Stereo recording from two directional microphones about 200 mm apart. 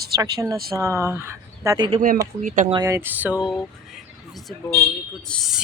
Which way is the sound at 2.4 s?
40° right (ahead or behind).